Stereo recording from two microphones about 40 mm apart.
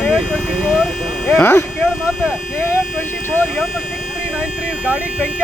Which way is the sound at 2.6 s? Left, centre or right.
Left.